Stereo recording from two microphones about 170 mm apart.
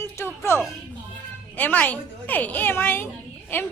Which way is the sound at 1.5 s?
10° left (ahead or behind).